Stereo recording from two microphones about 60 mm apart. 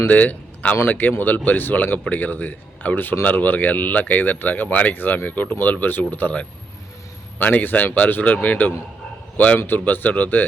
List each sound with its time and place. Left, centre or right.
0.1 s speech: left
7.3 s speech: left